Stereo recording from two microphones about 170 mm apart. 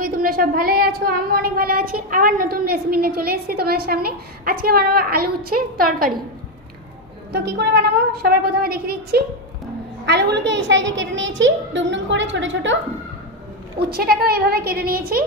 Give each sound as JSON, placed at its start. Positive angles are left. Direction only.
{"t": 0.0, "sound": "speech", "side_deg": -55}
{"t": 7.3, "sound": "a woman's voice", "side_deg": -80}
{"t": 10.0, "sound": "a woman's voice", "side_deg": -90}
{"t": 13.7, "sound": "speech", "side_deg": -65}